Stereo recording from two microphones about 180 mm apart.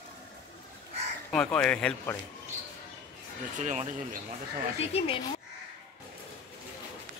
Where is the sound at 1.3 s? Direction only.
5° left (ahead or behind).